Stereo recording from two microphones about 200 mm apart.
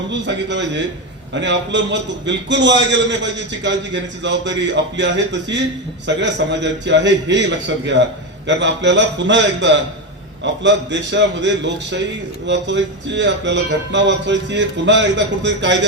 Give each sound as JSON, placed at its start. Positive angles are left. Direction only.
{"t": 0.1, "sound": "a man's voice", "side_deg": -60}
{"t": 8.4, "sound": "a man's voice", "side_deg": -60}